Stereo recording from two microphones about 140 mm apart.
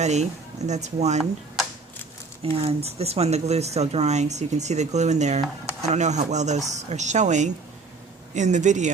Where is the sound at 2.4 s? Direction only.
45° right (ahead or behind).